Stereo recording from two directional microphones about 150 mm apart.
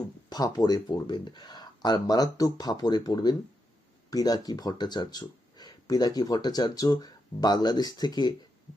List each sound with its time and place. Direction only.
0.3 s speech: 25° left (ahead or behind)